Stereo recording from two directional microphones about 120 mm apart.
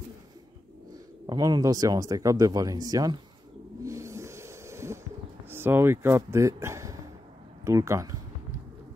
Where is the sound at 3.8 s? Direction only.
25° right (ahead or behind).